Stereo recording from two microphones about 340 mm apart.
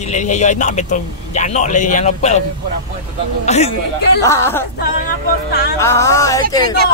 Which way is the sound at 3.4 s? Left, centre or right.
Centre.